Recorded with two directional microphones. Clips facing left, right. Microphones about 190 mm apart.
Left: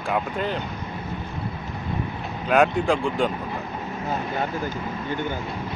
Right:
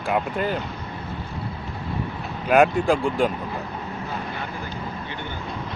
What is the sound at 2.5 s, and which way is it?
Speech, 5° right (ahead or behind).